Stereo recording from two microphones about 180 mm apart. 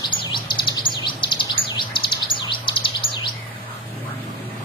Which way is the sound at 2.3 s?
25° left (ahead or behind).